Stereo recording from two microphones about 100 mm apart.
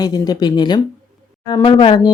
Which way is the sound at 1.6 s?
65° left (ahead or behind).